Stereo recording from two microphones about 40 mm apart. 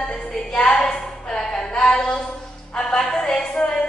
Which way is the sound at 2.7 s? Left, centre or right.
Centre.